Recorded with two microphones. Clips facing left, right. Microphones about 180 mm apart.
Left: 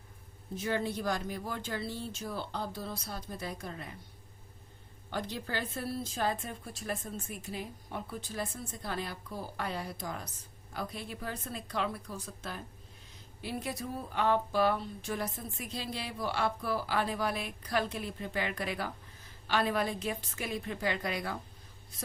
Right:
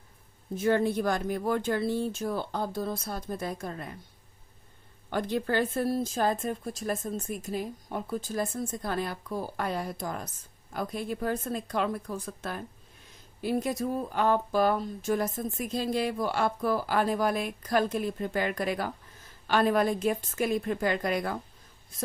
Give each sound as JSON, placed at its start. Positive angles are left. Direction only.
{"t": 0.5, "sound": "speech", "side_deg": -50}
{"t": 5.1, "sound": "speech", "side_deg": -55}
{"t": 13.4, "sound": "speech", "side_deg": -45}